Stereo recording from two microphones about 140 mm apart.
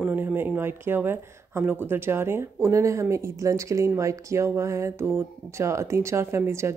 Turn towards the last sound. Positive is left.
turn(degrees=-20)  # may be behind; listen again after turning